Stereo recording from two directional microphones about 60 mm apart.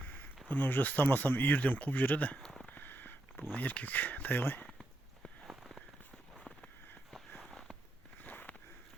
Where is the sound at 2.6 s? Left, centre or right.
Left.